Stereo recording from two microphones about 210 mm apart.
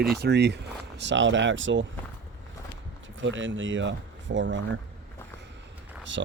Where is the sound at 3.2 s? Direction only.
65° right (ahead or behind).